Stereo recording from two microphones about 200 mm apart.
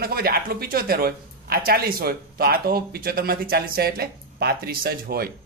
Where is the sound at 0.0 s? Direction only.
50° right (ahead or behind).